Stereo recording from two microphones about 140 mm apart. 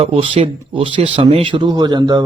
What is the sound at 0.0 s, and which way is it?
A man's voice, 45° right (ahead or behind).